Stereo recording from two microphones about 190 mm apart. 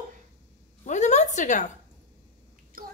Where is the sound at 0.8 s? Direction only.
40° left (ahead or behind).